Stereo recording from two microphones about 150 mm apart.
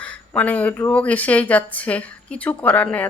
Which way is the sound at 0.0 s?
10° left (ahead or behind).